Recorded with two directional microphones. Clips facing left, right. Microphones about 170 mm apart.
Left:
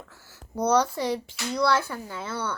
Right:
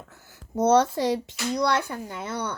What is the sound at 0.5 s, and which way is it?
Speech, 25° right (ahead or behind).